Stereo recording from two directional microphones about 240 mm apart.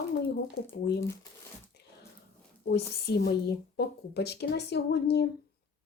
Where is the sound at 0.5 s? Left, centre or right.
Left.